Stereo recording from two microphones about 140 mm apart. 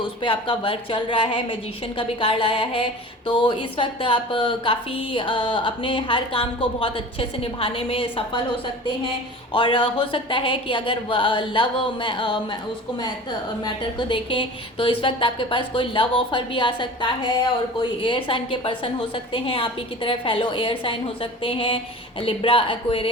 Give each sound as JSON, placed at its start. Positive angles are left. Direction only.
{"t": 0.0, "sound": "speech", "side_deg": 35}
{"t": 9.5, "sound": "speech", "side_deg": 35}
{"t": 14.1, "sound": "speech", "side_deg": 35}